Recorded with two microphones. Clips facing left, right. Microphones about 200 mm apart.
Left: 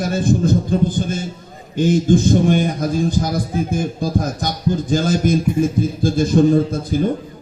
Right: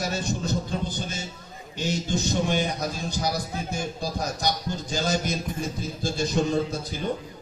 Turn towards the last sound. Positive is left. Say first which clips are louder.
# left 10 dB
turn(degrees=50)  # may be behind; listen again after turning